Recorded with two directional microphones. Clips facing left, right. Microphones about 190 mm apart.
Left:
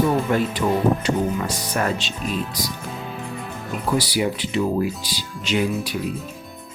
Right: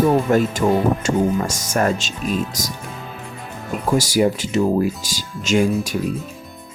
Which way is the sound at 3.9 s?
45° right (ahead or behind).